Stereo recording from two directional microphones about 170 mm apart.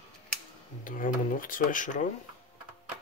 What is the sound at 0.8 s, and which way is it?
Speech, 55° left (ahead or behind).